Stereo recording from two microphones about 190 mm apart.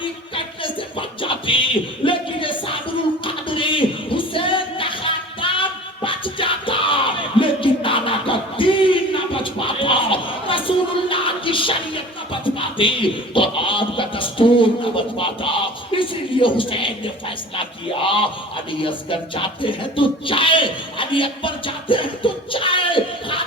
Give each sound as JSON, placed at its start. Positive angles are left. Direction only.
{"t": 0.0, "sound": "music", "side_deg": 25}